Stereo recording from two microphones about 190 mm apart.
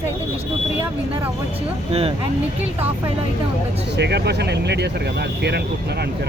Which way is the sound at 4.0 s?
60° right (ahead or behind).